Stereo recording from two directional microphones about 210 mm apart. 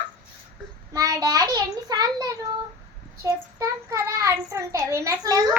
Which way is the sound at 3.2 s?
15° right (ahead or behind).